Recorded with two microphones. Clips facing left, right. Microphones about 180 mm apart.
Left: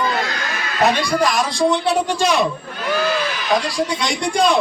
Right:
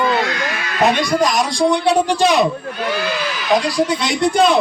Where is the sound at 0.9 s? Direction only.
20° right (ahead or behind).